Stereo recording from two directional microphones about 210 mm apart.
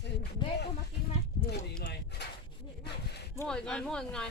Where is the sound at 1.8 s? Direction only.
50° left (ahead or behind).